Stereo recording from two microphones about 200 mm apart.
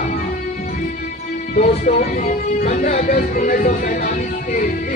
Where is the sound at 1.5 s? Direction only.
40° left (ahead or behind).